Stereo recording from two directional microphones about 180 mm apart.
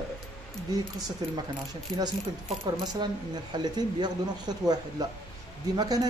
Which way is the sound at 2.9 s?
25° right (ahead or behind).